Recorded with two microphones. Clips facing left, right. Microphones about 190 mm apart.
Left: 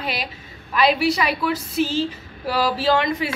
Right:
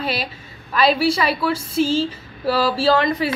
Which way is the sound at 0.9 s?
30° right (ahead or behind).